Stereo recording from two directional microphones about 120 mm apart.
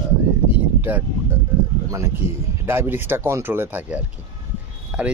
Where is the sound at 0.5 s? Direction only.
15° right (ahead or behind).